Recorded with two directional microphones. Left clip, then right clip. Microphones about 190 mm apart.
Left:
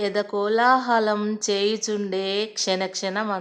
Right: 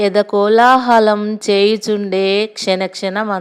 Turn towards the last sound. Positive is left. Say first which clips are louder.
# right 7 dB
turn(degrees=-30)  # may be behind; listen again after turning